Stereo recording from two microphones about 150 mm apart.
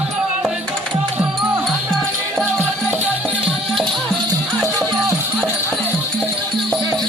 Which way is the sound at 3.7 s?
Centre (ahead or behind).